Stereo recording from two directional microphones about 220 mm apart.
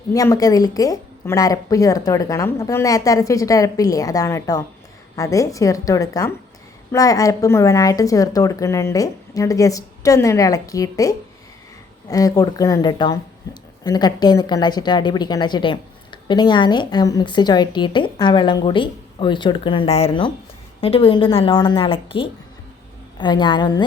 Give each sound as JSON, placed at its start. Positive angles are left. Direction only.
{"t": 0.1, "sound": "a woman's voice", "side_deg": 15}